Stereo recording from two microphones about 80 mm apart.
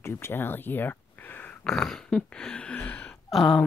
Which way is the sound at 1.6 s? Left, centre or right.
Centre.